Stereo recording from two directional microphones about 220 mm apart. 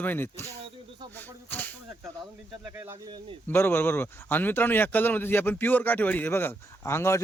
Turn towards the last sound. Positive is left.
turn(degrees=10)  # may be behind; listen again after turning